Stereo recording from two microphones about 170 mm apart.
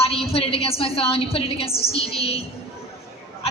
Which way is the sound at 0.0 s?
35° left (ahead or behind).